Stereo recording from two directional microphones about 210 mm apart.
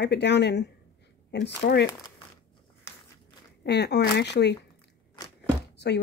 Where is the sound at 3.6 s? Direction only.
55° left (ahead or behind).